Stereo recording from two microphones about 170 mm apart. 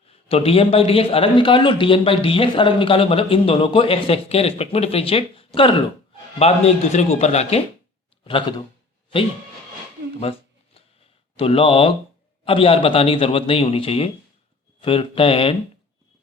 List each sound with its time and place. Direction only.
0.1 s a man's voice: 35° left (ahead or behind)
8.2 s speech: 30° left (ahead or behind)
11.3 s a man's voice: 35° left (ahead or behind)